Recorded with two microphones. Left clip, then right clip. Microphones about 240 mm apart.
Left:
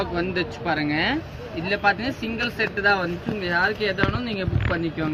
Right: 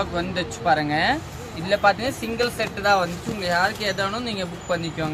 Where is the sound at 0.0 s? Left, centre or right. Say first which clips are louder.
Even; right.